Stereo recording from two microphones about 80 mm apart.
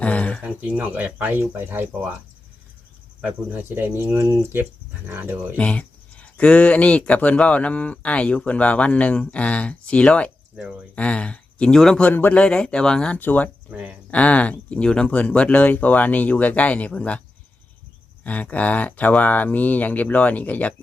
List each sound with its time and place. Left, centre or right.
0.0 s speech: centre
0.4 s speech: right
3.5 s speech: right
5.5 s speech: centre
10.5 s speech: centre
10.9 s speech: centre
12.0 s speech: left
12.4 s speech: centre
13.1 s speech: left
13.7 s speech: centre
14.1 s speech: centre